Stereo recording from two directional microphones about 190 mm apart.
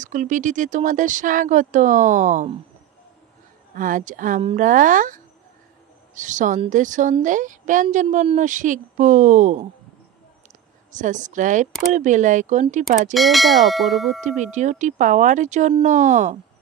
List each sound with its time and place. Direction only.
0.0 s a woman's voice: 40° right (ahead or behind)
3.7 s a woman's voice: 45° right (ahead or behind)
11.0 s a woman's voice: 40° right (ahead or behind)
13.1 s speech: centre (ahead or behind)
14.4 s a woman's voice: 40° right (ahead or behind)